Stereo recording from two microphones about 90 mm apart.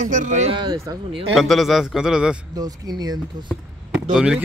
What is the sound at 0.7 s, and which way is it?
Speech, 40° right (ahead or behind).